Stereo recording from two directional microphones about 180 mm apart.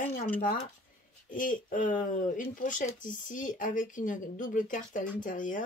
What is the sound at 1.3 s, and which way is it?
Speech, 45° left (ahead or behind).